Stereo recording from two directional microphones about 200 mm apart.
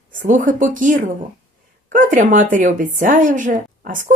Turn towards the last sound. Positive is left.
turn(degrees=-40)  # may be behind; listen again after turning